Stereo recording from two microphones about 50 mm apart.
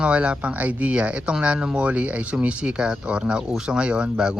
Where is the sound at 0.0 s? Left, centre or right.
Right.